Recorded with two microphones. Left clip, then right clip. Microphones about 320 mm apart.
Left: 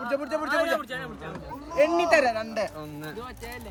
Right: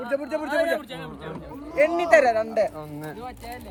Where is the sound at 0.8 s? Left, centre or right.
Centre.